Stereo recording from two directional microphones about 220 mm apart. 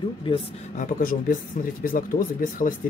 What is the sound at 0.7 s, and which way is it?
Speech, 40° left (ahead or behind).